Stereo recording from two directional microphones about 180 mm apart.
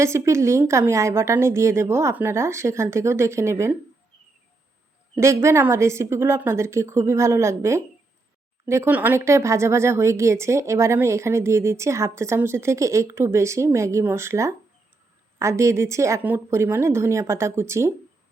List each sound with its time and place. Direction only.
0.0 s speech: 15° right (ahead or behind)
5.1 s speech: 15° right (ahead or behind)